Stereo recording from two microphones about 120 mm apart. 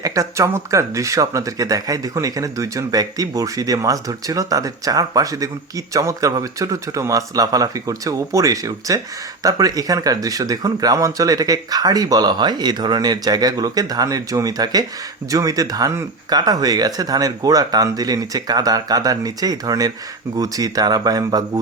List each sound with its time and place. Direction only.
0.0 s speech: 25° right (ahead or behind)